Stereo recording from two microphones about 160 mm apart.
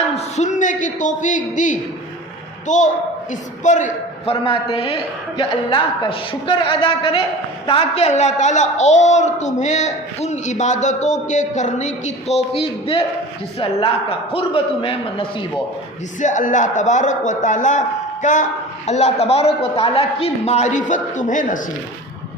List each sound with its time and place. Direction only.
0.2 s a man's voice: 45° left (ahead or behind)
4.3 s a man's voice: 35° left (ahead or behind)
16.2 s a woman's voice: 50° left (ahead or behind)
18.9 s a man's voice: 40° left (ahead or behind)